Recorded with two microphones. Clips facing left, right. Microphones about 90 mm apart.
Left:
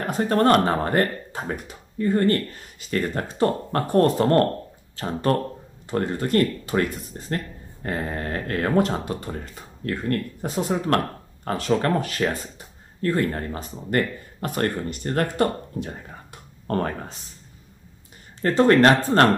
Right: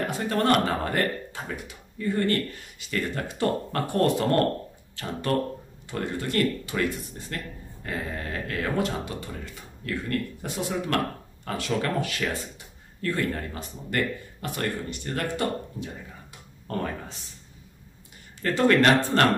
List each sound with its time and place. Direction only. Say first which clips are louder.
0.0 s speech: left 5 dB; 40° left (ahead or behind)
18.4 s speech: left 4 dB; 35° left (ahead or behind)